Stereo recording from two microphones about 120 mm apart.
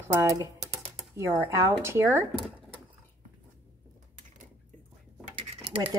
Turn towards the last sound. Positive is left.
turn(degrees=-50)  # may be behind; listen again after turning